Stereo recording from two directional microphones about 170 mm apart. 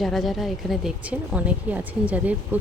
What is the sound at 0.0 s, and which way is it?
Speech, centre (ahead or behind).